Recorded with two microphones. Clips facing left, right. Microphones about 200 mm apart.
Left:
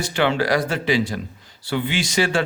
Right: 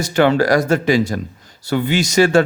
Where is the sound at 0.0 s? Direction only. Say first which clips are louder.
Right 6 dB; 40° right (ahead or behind).